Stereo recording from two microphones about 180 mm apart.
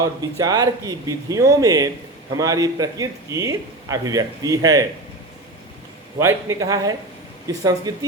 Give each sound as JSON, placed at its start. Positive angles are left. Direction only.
{"t": 0.0, "sound": "a man's voice", "side_deg": -20}
{"t": 6.1, "sound": "a man's voice", "side_deg": -15}